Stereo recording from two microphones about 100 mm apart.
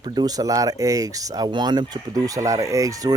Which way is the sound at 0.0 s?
40° right (ahead or behind).